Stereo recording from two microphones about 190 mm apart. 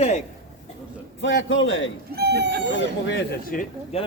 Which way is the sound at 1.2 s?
70° left (ahead or behind).